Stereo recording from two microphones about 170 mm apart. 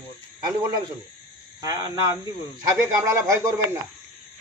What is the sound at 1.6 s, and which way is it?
Speech, 20° right (ahead or behind).